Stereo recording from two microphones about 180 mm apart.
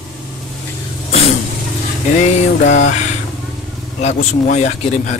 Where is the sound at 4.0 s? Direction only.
40° left (ahead or behind).